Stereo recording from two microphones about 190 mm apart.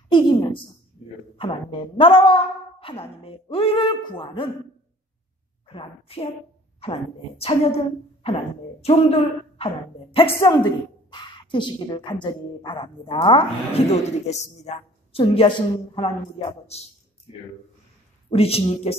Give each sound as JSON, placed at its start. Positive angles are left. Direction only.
{"t": 0.1, "sound": "a sound", "side_deg": 25}
{"t": 1.4, "sound": "a woman's voice", "side_deg": 25}
{"t": 5.7, "sound": "a woman's voice", "side_deg": 30}
{"t": 18.3, "sound": "a woman's voice", "side_deg": 30}